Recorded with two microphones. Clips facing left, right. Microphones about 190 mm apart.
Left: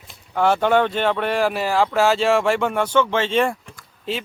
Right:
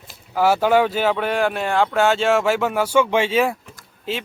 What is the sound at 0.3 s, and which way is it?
Speech, 5° right (ahead or behind).